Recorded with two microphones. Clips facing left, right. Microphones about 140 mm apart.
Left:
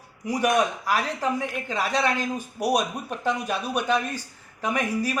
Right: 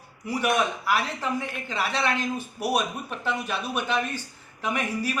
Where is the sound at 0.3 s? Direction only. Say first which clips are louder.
Left 2 dB; 40° left (ahead or behind).